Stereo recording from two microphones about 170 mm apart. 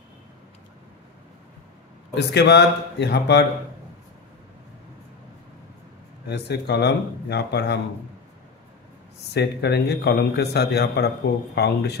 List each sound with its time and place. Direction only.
2.1 s speech: 85° left
6.2 s a man's voice: 75° left (ahead or behind)
9.3 s a man's voice: 80° left